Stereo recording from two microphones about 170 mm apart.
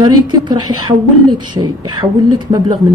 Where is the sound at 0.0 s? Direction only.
25° right (ahead or behind).